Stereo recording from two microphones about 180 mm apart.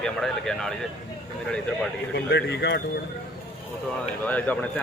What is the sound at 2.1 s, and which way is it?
Speech, 70° left (ahead or behind).